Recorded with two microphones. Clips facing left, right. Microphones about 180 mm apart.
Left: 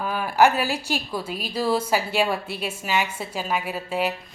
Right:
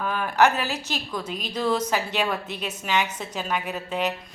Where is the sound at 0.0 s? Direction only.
10° left (ahead or behind).